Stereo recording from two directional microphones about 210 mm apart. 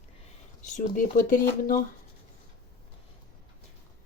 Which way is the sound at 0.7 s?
40° left (ahead or behind).